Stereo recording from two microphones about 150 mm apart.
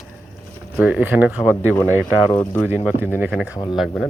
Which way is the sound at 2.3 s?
15° left (ahead or behind).